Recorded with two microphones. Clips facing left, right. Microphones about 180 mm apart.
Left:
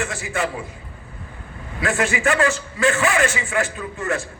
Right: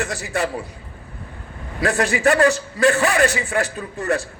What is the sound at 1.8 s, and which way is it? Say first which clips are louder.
A man's voice: right 2 dB; 35° right (ahead or behind).